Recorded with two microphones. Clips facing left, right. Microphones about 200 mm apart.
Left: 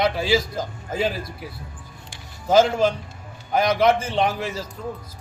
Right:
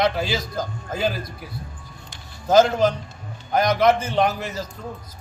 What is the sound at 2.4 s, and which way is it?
A man's voice, 10° left (ahead or behind).